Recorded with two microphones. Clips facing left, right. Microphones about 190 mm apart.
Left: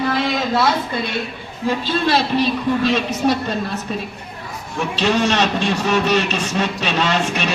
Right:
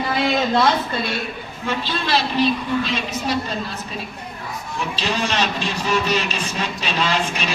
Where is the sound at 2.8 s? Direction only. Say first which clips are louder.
Left 7 dB; 65° left (ahead or behind).